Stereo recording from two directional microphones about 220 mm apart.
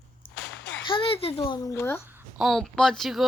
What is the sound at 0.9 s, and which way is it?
A child's voice, 25° left (ahead or behind).